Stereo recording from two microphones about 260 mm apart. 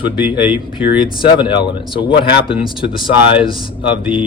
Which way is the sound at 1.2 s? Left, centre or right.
Centre.